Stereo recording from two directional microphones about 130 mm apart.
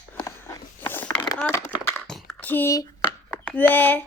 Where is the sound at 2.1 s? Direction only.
5° left (ahead or behind).